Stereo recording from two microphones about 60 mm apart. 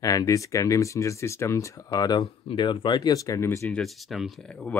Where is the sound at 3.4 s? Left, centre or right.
Left.